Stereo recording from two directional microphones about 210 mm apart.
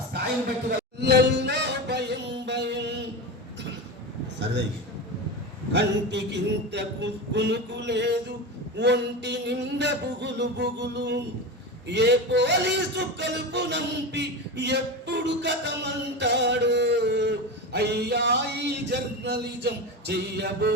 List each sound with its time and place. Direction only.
1.0 s a sound: 55° right (ahead or behind)
4.4 s a man's voice: 55° right (ahead or behind)
5.7 s a man's voice: 55° right (ahead or behind)